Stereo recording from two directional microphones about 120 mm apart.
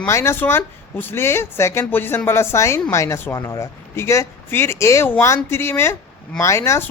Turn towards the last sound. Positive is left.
turn(degrees=20)  # may be behind; listen again after turning